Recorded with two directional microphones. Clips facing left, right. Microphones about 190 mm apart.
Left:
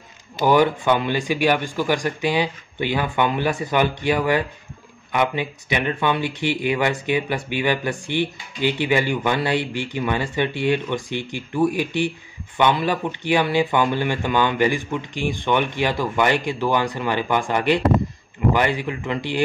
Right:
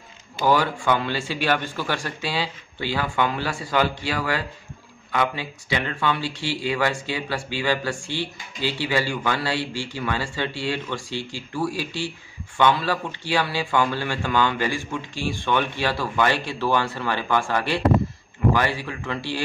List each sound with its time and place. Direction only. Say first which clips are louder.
0.5 s speech: left 4 dB; 20° left (ahead or behind)